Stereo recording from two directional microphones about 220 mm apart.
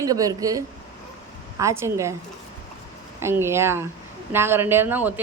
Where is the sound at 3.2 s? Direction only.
10° right (ahead or behind).